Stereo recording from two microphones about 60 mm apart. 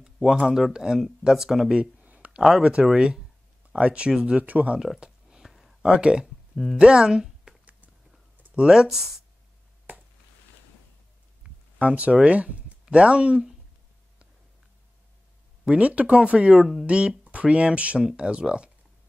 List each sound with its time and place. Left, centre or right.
0.0 s a sound: centre
0.5 s speech: centre
2.0 s a sound: right
2.6 s speech: centre
4.4 s speech: right
4.7 s speech: centre
5.0 s a sound: centre
5.8 s speech: centre
6.5 s speech: centre
6.8 s speech: centre
8.5 s speech: centre
11.4 s a sound: right
11.8 s speech: right
15.6 s speech: centre